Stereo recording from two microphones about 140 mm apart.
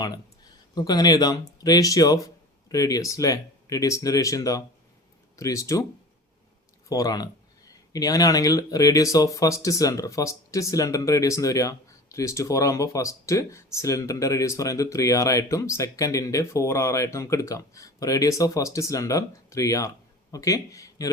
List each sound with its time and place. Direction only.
0.8 s speech: 30° left (ahead or behind)
6.8 s speech: 25° left (ahead or behind)